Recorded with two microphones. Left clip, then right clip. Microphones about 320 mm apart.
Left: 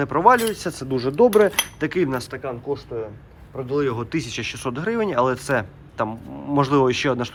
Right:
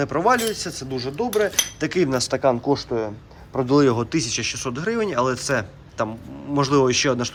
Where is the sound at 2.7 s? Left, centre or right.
Right.